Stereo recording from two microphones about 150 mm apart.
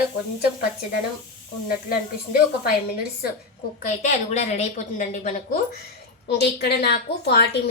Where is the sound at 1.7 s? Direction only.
70° left (ahead or behind).